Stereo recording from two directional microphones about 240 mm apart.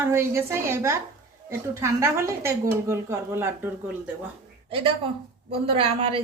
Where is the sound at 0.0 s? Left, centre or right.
Centre.